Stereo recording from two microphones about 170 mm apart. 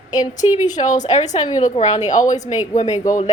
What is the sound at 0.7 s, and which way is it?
A woman's voice, 45° left (ahead or behind).